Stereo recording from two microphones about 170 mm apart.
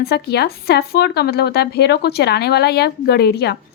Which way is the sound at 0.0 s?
70° left (ahead or behind).